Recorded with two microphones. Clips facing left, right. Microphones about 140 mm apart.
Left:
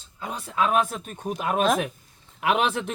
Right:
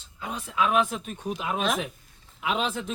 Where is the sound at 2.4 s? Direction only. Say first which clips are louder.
Left 5 dB; 65° left (ahead or behind).